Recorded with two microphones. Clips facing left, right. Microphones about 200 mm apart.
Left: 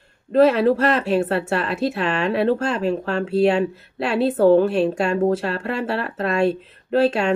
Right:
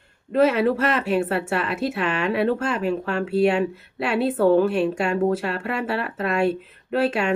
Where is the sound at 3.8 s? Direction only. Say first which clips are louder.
Left 2 dB; 5° right (ahead or behind).